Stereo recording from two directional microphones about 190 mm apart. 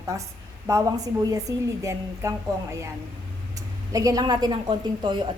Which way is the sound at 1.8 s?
15° right (ahead or behind).